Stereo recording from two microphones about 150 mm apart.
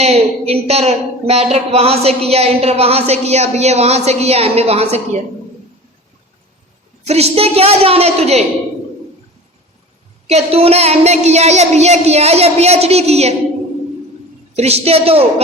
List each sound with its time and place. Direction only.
0.0 s a woman's voice: 45° right (ahead or behind)
7.0 s a woman's voice: 45° right (ahead or behind)
10.2 s a woman's voice: 45° right (ahead or behind)
14.5 s a man's voice: 45° right (ahead or behind)